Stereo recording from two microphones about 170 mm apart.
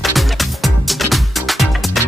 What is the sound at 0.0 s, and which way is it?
Music, centre (ahead or behind).